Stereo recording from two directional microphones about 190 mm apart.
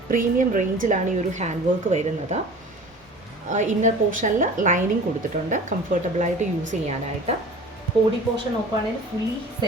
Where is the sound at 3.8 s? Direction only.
45° right (ahead or behind).